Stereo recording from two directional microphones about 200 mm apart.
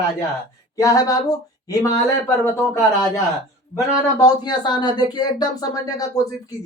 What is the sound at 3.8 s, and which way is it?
Speech, 20° left (ahead or behind).